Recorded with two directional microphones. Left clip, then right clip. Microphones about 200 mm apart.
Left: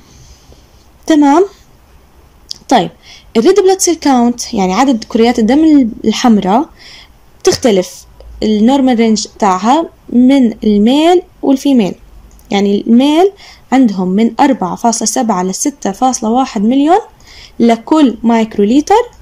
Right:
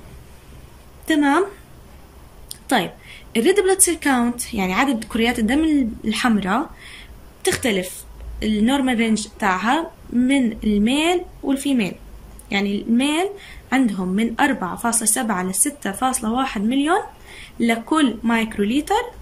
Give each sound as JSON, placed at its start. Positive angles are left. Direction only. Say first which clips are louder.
{"t": 1.0, "sound": "speech", "louder": "left 9 dB", "side_deg": 25}
{"t": 2.7, "sound": "speech", "louder": "left 10 dB", "side_deg": 25}